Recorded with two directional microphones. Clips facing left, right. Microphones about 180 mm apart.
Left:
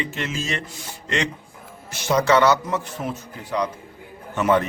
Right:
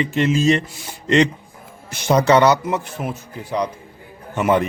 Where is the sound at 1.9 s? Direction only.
20° right (ahead or behind).